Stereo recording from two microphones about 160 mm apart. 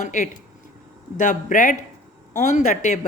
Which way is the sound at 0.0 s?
50° left (ahead or behind).